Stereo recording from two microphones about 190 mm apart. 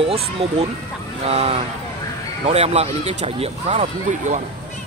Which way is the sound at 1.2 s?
35° right (ahead or behind).